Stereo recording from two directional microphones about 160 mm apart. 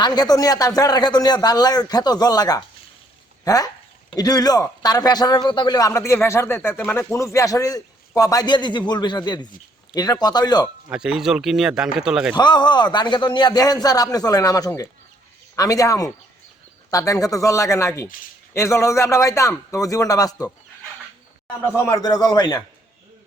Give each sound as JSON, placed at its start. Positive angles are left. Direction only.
{"t": 0.0, "sound": "a man's voice", "side_deg": 25}
{"t": 10.8, "sound": "speech", "side_deg": -5}
{"t": 12.4, "sound": "a man's voice", "side_deg": 25}